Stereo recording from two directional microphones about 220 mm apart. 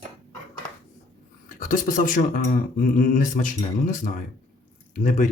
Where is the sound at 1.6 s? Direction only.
40° left (ahead or behind).